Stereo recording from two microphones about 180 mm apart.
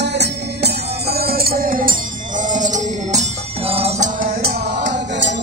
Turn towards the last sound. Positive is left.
turn(degrees=-80)